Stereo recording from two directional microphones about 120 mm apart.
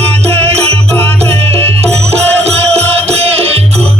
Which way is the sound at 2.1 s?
60° right (ahead or behind).